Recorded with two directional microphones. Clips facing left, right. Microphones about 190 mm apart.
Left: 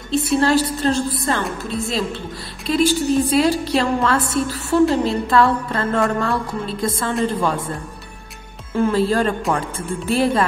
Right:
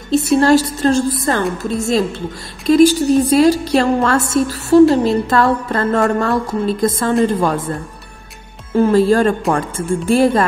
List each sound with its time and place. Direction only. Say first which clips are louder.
0.1 s a woman's voice: right 5 dB; 45° right (ahead or behind)
8.7 s a woman's voice: right 6 dB; 45° right (ahead or behind)